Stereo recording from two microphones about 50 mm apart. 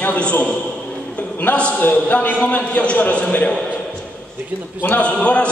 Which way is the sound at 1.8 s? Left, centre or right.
Left.